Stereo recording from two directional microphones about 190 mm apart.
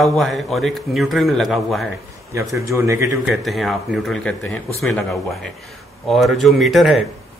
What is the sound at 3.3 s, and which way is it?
A man's voice, centre (ahead or behind).